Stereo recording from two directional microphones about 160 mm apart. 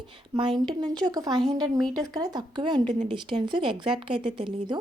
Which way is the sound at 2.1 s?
25° right (ahead or behind).